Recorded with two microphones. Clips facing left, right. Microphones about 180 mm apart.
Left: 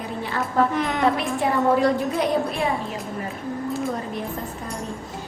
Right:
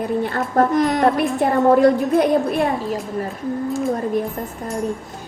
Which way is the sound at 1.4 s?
55° right (ahead or behind).